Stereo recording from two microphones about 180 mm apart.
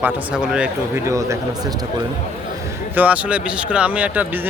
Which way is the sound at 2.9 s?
10° right (ahead or behind).